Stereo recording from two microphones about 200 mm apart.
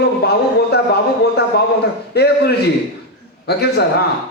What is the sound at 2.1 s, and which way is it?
A man's voice, 55° left (ahead or behind).